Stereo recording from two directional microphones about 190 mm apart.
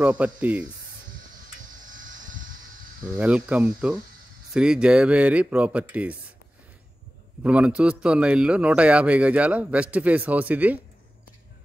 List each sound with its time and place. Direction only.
0.0 s a man's voice: 10° right (ahead or behind)
1.9 s vehicle: 45° right (ahead or behind)
3.2 s a man's voice: 5° right (ahead or behind)
7.4 s a man's voice: 5° right (ahead or behind)